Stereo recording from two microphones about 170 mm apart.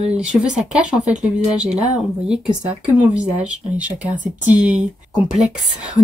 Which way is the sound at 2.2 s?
5° right (ahead or behind).